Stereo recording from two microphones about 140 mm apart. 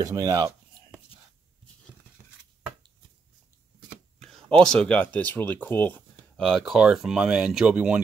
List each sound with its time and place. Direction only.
0.0 s speech: 25° right (ahead or behind)
4.2 s speech: 5° left (ahead or behind)